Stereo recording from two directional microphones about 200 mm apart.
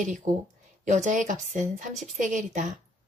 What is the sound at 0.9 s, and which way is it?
Speech, 35° right (ahead or behind).